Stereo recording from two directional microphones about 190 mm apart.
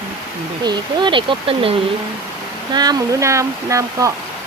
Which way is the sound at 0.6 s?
25° right (ahead or behind).